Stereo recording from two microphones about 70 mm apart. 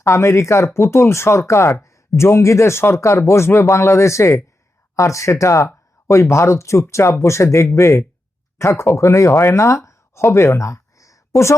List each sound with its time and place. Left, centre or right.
0.0 s speech: left